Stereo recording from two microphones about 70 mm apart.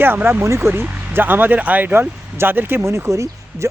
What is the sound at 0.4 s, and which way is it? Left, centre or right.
Speech, right.